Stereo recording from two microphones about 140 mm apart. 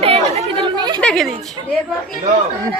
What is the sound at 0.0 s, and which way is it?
Chatter, 45° right (ahead or behind).